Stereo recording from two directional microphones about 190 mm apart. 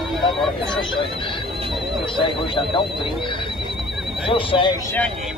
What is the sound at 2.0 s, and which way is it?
Speech, 25° left (ahead or behind).